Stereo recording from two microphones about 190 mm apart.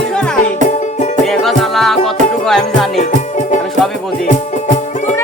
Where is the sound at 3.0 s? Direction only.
40° left (ahead or behind).